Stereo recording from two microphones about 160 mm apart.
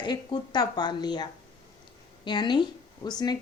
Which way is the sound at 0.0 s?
30° left (ahead or behind).